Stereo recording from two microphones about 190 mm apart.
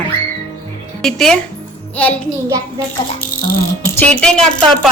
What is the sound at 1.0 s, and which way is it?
Speech, centre (ahead or behind).